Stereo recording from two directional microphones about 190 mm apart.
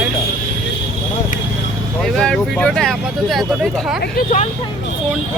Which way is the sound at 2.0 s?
5° left (ahead or behind).